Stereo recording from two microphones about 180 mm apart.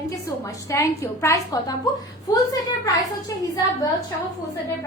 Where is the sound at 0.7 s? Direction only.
15° left (ahead or behind).